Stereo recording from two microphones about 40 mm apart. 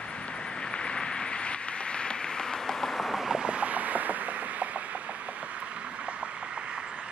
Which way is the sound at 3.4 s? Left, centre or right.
Right.